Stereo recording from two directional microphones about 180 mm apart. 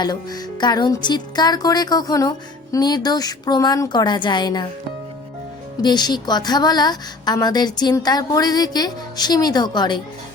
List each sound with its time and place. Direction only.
0.0 s a woman's voice: 25° left (ahead or behind)
5.8 s a woman's voice: 25° left (ahead or behind)